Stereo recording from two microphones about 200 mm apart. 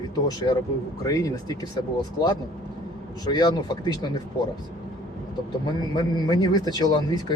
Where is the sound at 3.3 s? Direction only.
20° left (ahead or behind).